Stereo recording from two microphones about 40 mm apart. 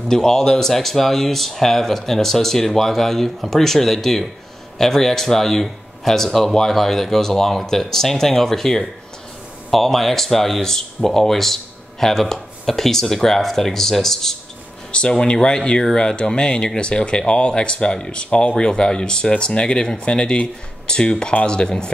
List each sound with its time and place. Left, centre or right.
0.1 s speech: centre
14.9 s speech: left